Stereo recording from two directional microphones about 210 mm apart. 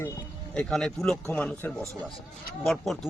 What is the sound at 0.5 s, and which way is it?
Speech, 5° left (ahead or behind).